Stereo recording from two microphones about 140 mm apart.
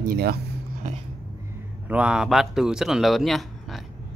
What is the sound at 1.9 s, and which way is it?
Speech, 5° right (ahead or behind).